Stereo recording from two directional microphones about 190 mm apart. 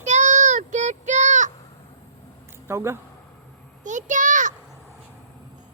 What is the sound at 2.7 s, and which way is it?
Speech, 15° right (ahead or behind).